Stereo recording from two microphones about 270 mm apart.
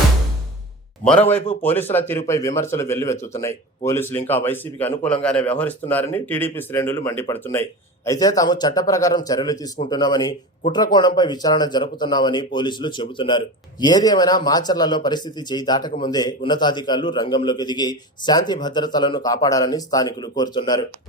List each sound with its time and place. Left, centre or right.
1.6 s speech: centre